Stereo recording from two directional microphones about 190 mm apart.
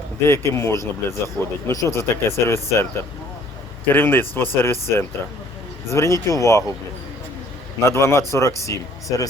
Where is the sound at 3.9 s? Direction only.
10° left (ahead or behind).